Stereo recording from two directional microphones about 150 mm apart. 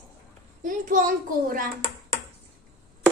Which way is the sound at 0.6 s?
60° right (ahead or behind).